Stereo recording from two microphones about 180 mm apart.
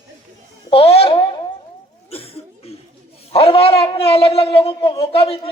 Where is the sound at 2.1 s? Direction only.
35° left (ahead or behind).